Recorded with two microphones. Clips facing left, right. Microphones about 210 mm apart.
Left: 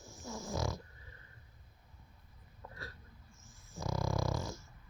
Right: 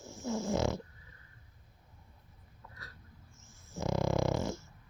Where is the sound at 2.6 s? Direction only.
30° left (ahead or behind).